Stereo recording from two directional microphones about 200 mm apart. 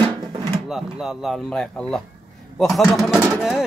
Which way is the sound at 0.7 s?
Centre (ahead or behind).